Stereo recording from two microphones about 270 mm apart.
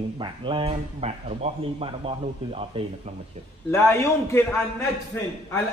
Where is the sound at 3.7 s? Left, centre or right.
Centre.